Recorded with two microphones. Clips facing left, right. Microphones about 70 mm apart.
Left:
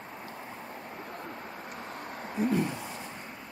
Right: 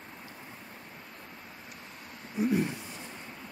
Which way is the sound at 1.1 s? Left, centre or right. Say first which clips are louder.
Left 8 dB; left.